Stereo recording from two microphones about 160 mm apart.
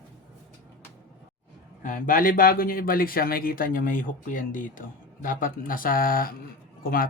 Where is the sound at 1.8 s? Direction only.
55° left (ahead or behind).